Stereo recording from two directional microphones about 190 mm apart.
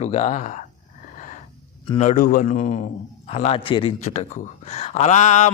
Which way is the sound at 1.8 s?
35° left (ahead or behind).